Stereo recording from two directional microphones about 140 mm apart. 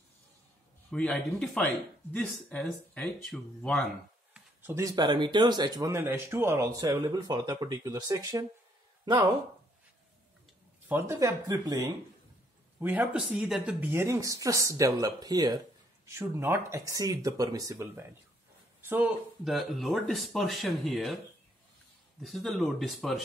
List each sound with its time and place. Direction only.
0.8 s speech: 5° left (ahead or behind)
4.3 s speech: 15° right (ahead or behind); by 9.3 s 30° right (ahead or behind)
10.9 s speech: 20° right (ahead or behind)
12.7 s speech: 15° right (ahead or behind)
19.5 s speech: centre (ahead or behind)
22.2 s speech: centre (ahead or behind)